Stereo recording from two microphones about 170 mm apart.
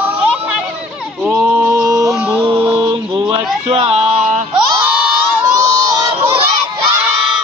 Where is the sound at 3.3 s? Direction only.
35° right (ahead or behind).